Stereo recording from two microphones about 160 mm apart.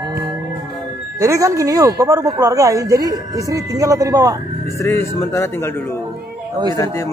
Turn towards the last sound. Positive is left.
turn(degrees=20)  # may be behind; listen again after turning